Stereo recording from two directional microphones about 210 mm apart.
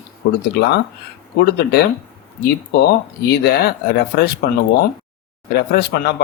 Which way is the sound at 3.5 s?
50° left (ahead or behind).